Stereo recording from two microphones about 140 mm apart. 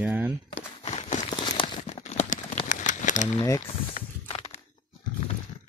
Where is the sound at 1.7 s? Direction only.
55° left (ahead or behind).